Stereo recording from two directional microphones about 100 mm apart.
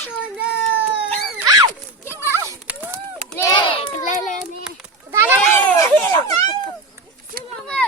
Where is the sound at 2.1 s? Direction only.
25° right (ahead or behind).